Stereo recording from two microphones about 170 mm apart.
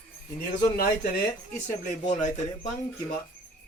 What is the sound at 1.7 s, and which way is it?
Speech, 45° left (ahead or behind).